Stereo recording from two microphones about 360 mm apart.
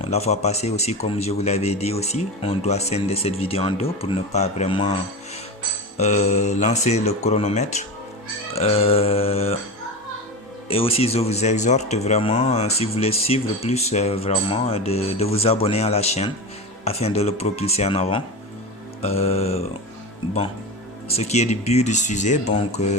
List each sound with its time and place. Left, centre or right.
0.0 s speech: centre
6.0 s speech: centre
10.7 s speech: centre
21.1 s speech: centre